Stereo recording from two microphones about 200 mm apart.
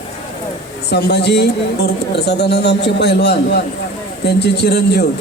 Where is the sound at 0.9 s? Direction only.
55° left (ahead or behind).